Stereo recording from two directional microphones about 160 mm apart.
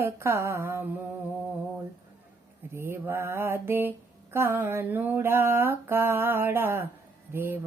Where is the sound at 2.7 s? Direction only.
15° right (ahead or behind).